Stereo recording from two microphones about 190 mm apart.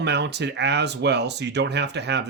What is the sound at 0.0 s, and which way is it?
Speech, 65° right (ahead or behind).